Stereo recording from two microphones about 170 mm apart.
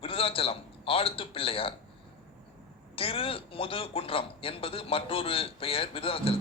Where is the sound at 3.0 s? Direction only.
35° left (ahead or behind).